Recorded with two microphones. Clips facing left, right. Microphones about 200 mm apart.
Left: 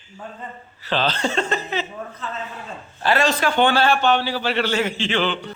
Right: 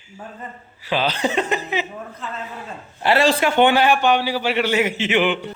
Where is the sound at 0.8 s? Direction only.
10° right (ahead or behind).